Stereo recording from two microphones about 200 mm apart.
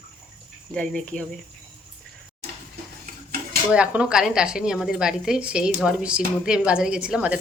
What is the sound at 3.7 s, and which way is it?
A woman's voice, 5° right (ahead or behind).